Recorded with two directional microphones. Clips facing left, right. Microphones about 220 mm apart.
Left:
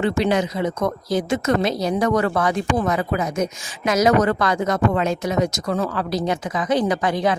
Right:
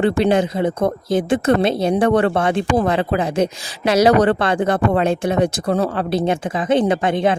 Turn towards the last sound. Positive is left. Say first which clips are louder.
# right 3 dB
turn(degrees=-25)  # may be behind; listen again after turning